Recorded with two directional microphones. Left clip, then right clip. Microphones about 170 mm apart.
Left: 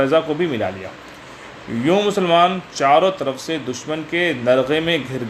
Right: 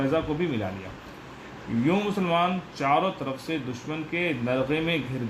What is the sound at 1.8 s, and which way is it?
Speech, 30° left (ahead or behind).